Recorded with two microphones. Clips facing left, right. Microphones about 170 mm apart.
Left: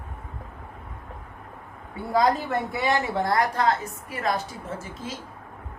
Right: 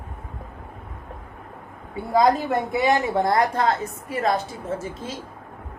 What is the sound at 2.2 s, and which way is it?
Speech, 20° right (ahead or behind).